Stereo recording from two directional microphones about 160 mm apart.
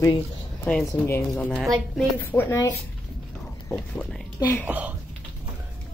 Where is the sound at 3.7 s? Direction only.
5° left (ahead or behind).